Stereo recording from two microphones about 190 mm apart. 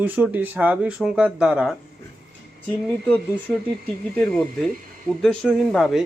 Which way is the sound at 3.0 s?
5° left (ahead or behind).